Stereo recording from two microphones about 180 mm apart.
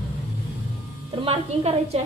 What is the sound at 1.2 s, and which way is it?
Speech, 35° right (ahead or behind).